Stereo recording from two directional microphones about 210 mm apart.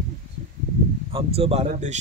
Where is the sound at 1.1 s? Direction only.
30° right (ahead or behind).